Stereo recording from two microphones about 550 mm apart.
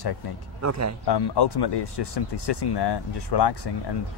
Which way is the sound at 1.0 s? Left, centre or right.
Left.